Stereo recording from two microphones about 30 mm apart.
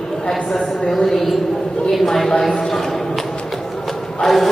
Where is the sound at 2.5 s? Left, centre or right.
Centre.